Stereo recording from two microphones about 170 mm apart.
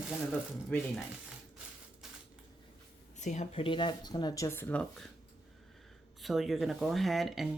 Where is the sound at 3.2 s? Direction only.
45° left (ahead or behind).